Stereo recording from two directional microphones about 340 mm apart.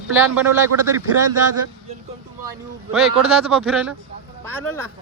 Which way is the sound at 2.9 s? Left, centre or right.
Centre.